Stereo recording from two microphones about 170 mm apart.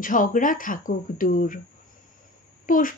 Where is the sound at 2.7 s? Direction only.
55° left (ahead or behind).